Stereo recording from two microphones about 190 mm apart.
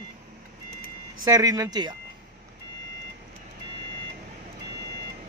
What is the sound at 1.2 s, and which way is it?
Speech, 20° right (ahead or behind).